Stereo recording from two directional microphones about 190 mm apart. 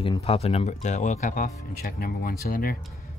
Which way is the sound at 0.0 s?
30° left (ahead or behind).